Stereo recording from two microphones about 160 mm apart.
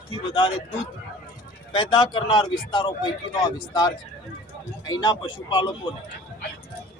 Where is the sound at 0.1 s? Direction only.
30° left (ahead or behind).